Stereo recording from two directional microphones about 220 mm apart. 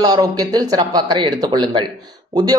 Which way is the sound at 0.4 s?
15° right (ahead or behind).